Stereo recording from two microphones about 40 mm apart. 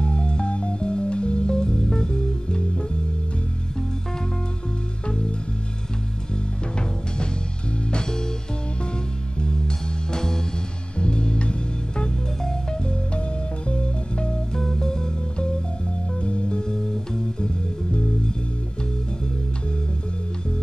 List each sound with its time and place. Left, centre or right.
0.0 s music: left
7.9 s music: centre
13.7 s music: left
14.5 s music: centre